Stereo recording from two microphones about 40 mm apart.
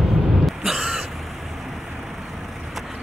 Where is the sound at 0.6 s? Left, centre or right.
Centre.